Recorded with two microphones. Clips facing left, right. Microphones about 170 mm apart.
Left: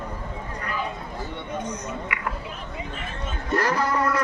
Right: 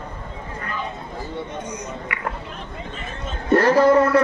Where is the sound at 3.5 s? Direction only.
30° right (ahead or behind).